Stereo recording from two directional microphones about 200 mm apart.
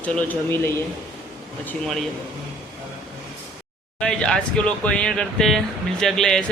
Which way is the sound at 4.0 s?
5° left (ahead or behind).